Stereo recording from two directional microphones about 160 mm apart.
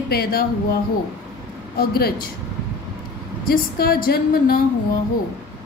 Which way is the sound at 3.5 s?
70° left (ahead or behind).